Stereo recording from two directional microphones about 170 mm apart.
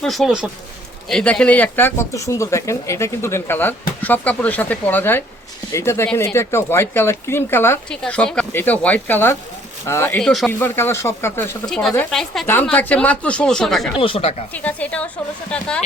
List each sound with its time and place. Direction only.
0.0 s speech: centre (ahead or behind)
1.1 s speech: 5° left (ahead or behind)
11.6 s speech: 5° left (ahead or behind)
14.0 s speech: 35° left (ahead or behind)
14.5 s speech: 10° left (ahead or behind)